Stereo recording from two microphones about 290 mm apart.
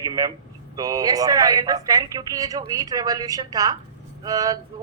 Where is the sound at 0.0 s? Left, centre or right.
Centre.